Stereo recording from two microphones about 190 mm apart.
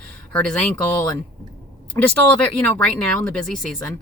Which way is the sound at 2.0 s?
10° left (ahead or behind).